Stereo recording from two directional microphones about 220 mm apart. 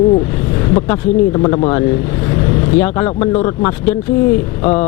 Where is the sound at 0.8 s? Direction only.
20° left (ahead or behind).